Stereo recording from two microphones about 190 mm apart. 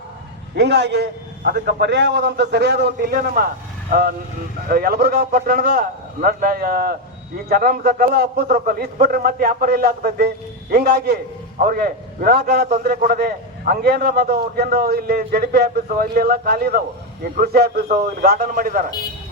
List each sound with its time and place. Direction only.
0.5 s a man's voice: 60° right (ahead or behind)